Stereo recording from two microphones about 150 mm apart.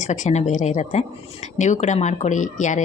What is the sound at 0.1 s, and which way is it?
A woman's voice, 50° left (ahead or behind).